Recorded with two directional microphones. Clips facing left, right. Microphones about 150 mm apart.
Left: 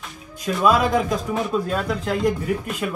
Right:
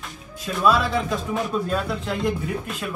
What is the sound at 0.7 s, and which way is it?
Speech, 45° left (ahead or behind).